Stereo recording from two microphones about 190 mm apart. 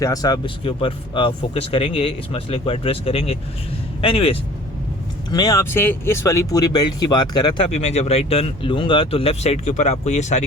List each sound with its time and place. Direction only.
0.0 s speech: 20° left (ahead or behind)
5.3 s speech: 20° left (ahead or behind)
7.7 s speech: 35° left (ahead or behind)